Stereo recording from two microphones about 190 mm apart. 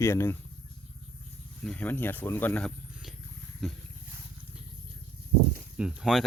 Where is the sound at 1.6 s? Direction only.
10° left (ahead or behind).